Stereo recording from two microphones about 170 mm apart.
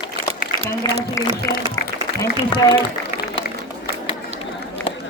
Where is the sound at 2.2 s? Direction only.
25° left (ahead or behind).